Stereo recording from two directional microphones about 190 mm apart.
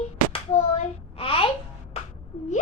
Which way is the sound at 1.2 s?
30° left (ahead or behind).